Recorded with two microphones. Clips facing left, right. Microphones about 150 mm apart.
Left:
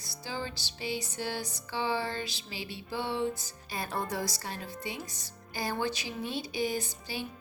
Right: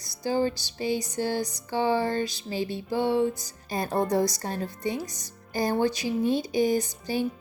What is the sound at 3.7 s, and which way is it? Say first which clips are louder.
A woman's voice: right 9 dB; 45° right (ahead or behind).